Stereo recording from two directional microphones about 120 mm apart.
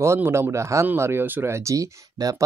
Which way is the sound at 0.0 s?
20° right (ahead or behind).